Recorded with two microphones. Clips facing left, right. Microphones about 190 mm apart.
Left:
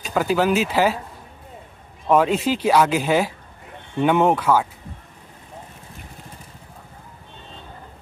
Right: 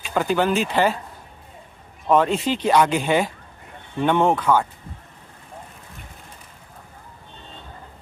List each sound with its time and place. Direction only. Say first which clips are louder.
0.1 s speech: left 1 dB; 5° left (ahead or behind)
2.0 s speech: left 1 dB; 5° left (ahead or behind)